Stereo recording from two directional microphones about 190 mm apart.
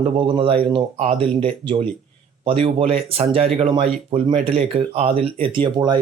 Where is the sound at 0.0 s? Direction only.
30° right (ahead or behind).